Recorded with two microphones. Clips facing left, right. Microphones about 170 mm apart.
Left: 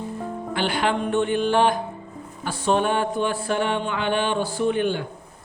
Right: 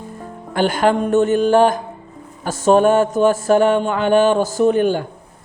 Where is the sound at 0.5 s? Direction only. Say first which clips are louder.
Right 8 dB; 45° right (ahead or behind).